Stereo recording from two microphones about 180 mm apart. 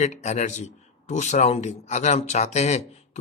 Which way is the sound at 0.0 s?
40° left (ahead or behind).